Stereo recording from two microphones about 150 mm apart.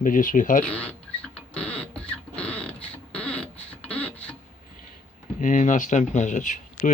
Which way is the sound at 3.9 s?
10° left (ahead or behind).